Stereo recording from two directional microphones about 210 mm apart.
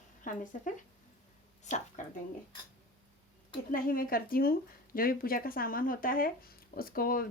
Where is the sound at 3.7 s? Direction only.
40° left (ahead or behind).